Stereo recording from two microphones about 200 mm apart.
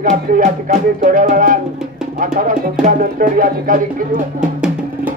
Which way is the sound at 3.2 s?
45° right (ahead or behind).